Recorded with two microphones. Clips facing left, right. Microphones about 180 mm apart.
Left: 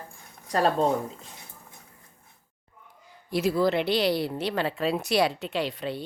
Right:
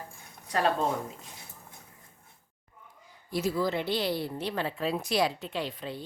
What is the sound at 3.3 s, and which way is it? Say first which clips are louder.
Speech: left 5 dB; 70° left (ahead or behind).